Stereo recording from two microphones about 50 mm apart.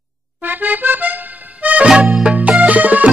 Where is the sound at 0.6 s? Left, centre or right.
Right.